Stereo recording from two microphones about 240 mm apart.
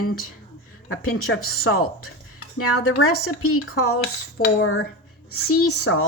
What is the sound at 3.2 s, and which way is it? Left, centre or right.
A woman's voice, left.